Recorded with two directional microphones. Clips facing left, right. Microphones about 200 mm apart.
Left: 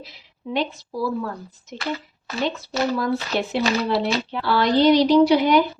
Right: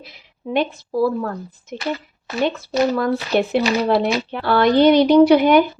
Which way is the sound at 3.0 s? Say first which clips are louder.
Right 5 dB; 55° right (ahead or behind).